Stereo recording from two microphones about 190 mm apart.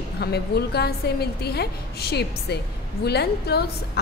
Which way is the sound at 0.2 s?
60° left (ahead or behind).